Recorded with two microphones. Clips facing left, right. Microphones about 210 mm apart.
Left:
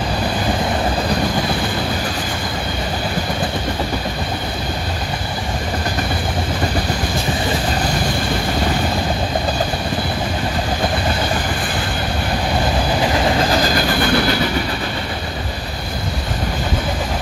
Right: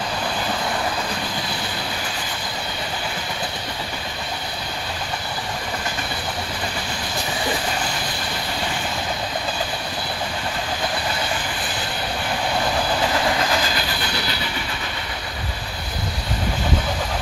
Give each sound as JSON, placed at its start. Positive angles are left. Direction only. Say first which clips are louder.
{"t": 13.5, "sound": "train", "louder": "left 7 dB", "side_deg": 40}